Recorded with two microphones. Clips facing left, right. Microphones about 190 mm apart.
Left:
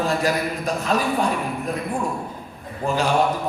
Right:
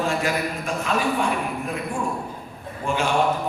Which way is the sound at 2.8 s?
35° left (ahead or behind).